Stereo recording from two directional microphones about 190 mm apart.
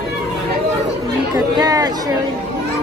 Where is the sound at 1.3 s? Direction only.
20° right (ahead or behind).